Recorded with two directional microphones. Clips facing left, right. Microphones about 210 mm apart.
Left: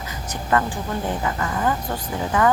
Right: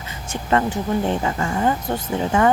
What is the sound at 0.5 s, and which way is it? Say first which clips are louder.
Speech: right 3 dB; 25° right (ahead or behind).